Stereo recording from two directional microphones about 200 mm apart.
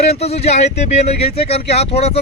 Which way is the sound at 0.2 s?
30° left (ahead or behind).